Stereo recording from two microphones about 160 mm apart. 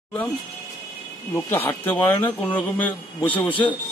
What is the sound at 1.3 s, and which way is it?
A man's voice, 15° left (ahead or behind).